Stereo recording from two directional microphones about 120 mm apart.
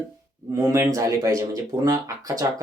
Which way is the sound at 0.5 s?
25° right (ahead or behind).